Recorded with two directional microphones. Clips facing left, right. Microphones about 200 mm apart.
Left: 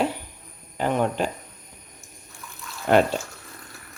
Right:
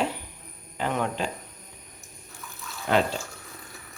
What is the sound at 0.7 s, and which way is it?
Speech, 45° left (ahead or behind).